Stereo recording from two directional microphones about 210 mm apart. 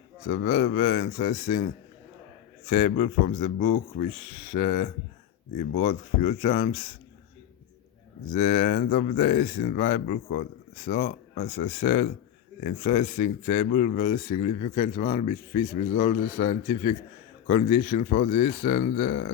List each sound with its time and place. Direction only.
0.3 s speech: 40° left (ahead or behind)
2.6 s speech: 35° left (ahead or behind)
8.3 s speech: 40° left (ahead or behind)